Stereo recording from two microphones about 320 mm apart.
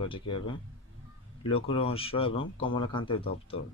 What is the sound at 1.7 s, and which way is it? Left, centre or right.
Speech, centre.